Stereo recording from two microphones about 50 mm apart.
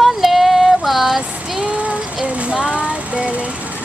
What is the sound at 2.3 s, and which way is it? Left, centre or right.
Speech, right.